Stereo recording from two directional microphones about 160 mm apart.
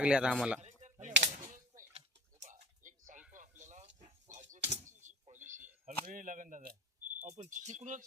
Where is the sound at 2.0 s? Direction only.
50° right (ahead or behind).